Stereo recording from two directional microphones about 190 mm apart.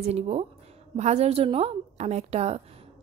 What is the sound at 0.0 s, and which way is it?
A woman's voice, 35° right (ahead or behind).